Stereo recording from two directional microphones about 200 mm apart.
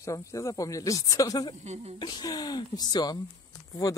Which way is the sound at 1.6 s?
35° right (ahead or behind).